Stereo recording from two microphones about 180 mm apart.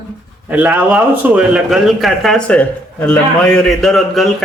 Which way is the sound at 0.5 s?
10° right (ahead or behind).